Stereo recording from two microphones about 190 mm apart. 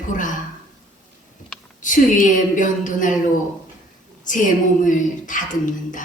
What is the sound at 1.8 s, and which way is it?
A woman's voice, 40° left (ahead or behind).